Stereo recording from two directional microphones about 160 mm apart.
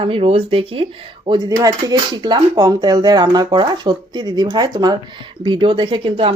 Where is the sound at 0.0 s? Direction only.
35° right (ahead or behind).